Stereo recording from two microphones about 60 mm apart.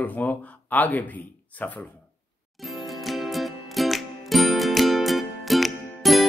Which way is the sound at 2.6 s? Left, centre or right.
Centre.